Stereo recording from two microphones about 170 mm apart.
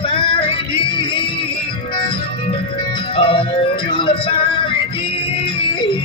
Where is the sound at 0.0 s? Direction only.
30° left (ahead or behind).